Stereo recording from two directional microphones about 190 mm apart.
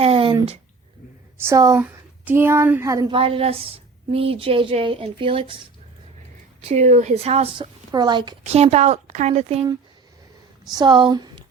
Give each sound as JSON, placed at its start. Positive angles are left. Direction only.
{"t": 0.0, "sound": "a sound", "side_deg": -30}
{"t": 1.5, "sound": "speech", "side_deg": -15}
{"t": 3.2, "sound": "a woman's voice", "side_deg": -30}
{"t": 6.6, "sound": "a woman's voice", "side_deg": -35}
{"t": 8.4, "sound": "a woman's voice", "side_deg": -35}
{"t": 10.7, "sound": "speech", "side_deg": -20}